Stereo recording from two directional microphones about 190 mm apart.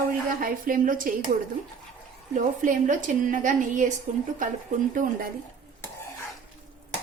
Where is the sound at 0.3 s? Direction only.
45° right (ahead or behind).